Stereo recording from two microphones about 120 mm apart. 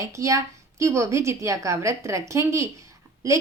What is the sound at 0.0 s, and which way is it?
A woman's voice, 25° right (ahead or behind).